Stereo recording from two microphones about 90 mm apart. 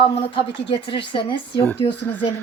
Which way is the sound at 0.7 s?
75° left (ahead or behind).